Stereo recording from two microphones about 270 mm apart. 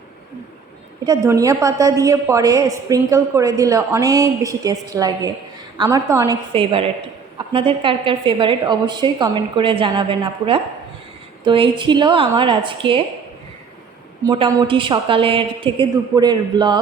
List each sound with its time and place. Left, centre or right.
1.0 s a woman's voice: centre
14.3 s a woman's voice: centre